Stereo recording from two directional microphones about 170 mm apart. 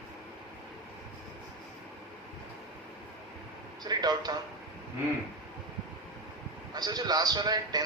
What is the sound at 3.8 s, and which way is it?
Speech, 25° right (ahead or behind).